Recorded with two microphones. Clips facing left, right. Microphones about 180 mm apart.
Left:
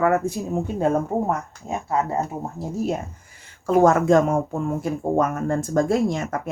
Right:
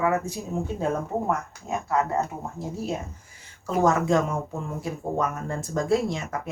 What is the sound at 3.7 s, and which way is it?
Speech, 55° left (ahead or behind).